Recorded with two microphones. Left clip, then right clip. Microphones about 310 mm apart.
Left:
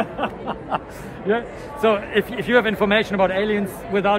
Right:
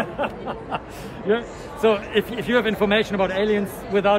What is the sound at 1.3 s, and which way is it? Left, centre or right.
A man's voice, centre.